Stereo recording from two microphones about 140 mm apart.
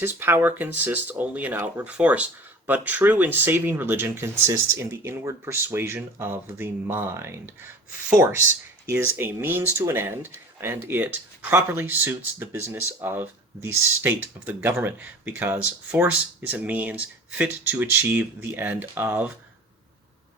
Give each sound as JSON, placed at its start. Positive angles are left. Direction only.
{"t": 0.0, "sound": "speech", "side_deg": -15}